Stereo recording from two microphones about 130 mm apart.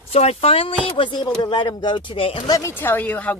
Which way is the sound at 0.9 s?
40° left (ahead or behind).